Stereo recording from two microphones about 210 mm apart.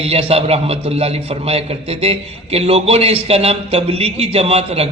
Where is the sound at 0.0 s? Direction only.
30° right (ahead or behind).